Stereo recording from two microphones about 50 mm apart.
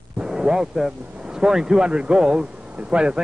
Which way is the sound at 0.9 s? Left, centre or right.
Right.